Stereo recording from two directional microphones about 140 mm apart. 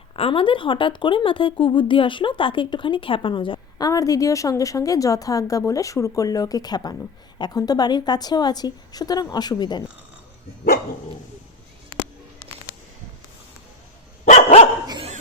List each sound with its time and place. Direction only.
0.2 s speech: 40° left (ahead or behind)
3.8 s a woman's voice: 25° left (ahead or behind)
14.3 s dog: 55° left (ahead or behind)